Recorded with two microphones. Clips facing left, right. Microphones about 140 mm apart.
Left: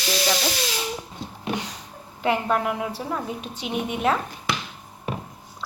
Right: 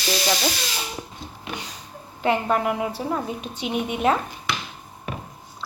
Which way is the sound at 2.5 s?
5° right (ahead or behind).